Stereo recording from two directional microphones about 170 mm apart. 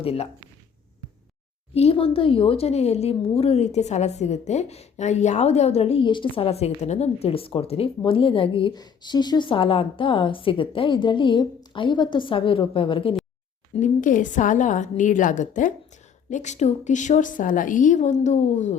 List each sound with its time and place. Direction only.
0.0 s speech: 35° left (ahead or behind)
1.7 s speech: 35° left (ahead or behind)
13.7 s a woman's voice: 50° left (ahead or behind)